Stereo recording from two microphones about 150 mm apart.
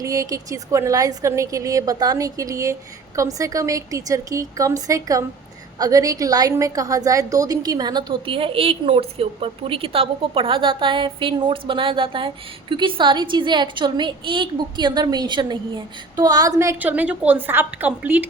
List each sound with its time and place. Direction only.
0.0 s a woman's voice: 20° right (ahead or behind)